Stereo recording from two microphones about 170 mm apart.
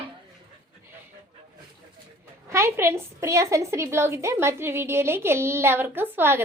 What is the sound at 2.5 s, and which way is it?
A woman's voice, 15° right (ahead or behind).